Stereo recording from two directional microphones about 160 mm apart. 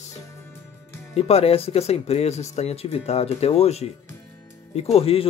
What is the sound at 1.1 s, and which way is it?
Speech, 40° left (ahead or behind).